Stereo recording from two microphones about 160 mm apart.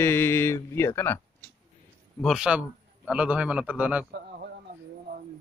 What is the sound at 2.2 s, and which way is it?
Speech, 5° right (ahead or behind).